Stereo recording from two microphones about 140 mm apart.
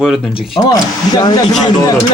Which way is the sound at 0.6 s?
30° left (ahead or behind).